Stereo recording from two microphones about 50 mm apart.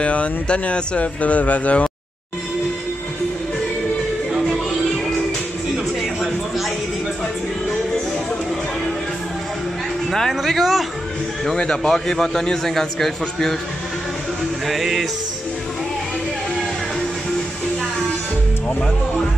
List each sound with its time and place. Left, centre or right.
0.0 s speech: left
10.1 s a man's voice: centre
11.4 s a man's voice: centre
14.7 s a man's voice: centre